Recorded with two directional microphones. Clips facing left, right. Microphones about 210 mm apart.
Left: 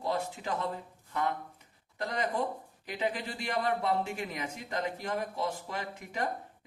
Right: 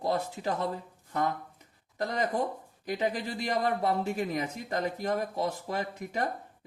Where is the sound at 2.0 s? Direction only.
40° right (ahead or behind).